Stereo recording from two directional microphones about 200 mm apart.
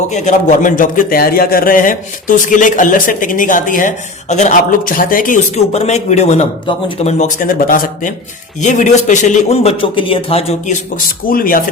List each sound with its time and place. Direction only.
0.1 s a man's voice: 40° left (ahead or behind)
11.3 s speech: 45° left (ahead or behind)